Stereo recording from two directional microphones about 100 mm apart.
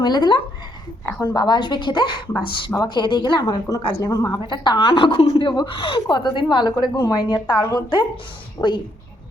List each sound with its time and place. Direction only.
0.0 s a woman's voice: 45° left (ahead or behind)
3.9 s a woman's voice: 35° left (ahead or behind)
4.4 s a woman's voice: 45° left (ahead or behind)
8.6 s a woman's voice: 25° left (ahead or behind)